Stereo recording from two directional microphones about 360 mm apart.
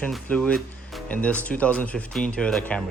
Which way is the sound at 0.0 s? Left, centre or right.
Centre.